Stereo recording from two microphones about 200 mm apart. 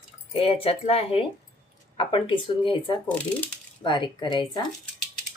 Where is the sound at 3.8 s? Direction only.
25° left (ahead or behind).